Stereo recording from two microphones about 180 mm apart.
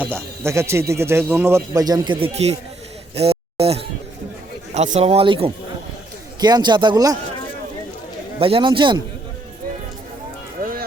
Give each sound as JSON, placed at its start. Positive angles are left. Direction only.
{"t": 0.0, "sound": "speech", "side_deg": -10}
{"t": 3.2, "sound": "a sound", "side_deg": -35}
{"t": 4.7, "sound": "a man's voice", "side_deg": -35}
{"t": 8.4, "sound": "a man's voice", "side_deg": -30}
{"t": 10.6, "sound": "music", "side_deg": -55}